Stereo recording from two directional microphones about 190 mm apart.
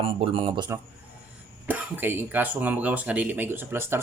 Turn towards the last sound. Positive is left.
turn(degrees=-10)  # may be behind; listen again after turning